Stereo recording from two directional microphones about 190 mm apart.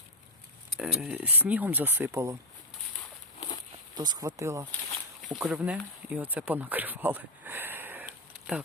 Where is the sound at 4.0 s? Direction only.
20° right (ahead or behind).